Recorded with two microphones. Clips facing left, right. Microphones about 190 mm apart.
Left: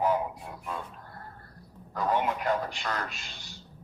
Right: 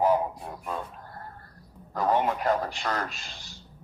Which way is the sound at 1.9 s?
40° right (ahead or behind).